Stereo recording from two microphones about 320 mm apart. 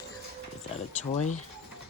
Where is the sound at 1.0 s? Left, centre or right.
Left.